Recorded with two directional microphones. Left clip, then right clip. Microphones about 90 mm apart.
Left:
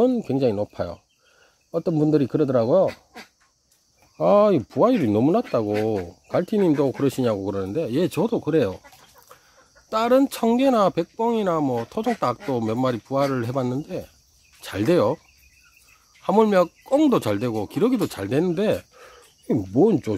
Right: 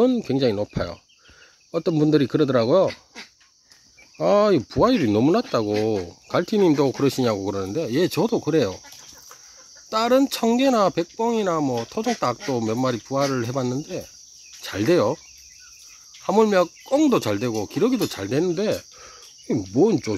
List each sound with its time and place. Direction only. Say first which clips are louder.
0.0 s speech: even; 10° left (ahead or behind)
4.2 s cricket: left 1 dB; 25° left (ahead or behind)
4.5 s speech: even; 10° left (ahead or behind)
9.8 s speech: even; 10° left (ahead or behind)
16.3 s speech: even; 20° left (ahead or behind)
18.5 s cricket: left 1 dB; 40° left (ahead or behind)
19.6 s cricket: even; 25° left (ahead or behind)